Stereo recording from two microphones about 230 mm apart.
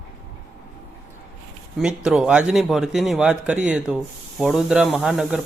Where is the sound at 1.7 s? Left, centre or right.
Centre.